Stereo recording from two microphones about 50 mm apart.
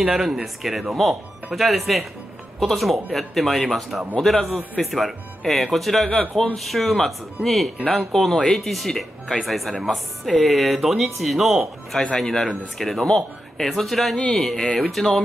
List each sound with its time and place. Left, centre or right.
0.0 s speech: centre
12.2 s speech: centre